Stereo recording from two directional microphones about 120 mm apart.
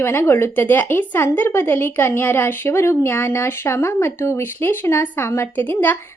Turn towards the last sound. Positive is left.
turn(degrees=15)  # may be behind; listen again after turning